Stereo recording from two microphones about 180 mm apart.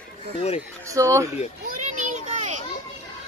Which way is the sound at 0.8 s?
15° right (ahead or behind).